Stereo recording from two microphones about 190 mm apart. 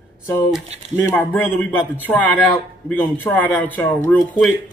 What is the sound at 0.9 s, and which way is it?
A man's voice, 10° left (ahead or behind).